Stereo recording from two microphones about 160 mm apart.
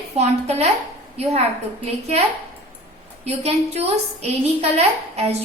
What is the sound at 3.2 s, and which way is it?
A woman's voice, 40° right (ahead or behind).